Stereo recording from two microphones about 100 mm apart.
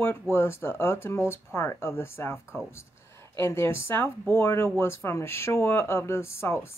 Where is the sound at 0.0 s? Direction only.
25° left (ahead or behind).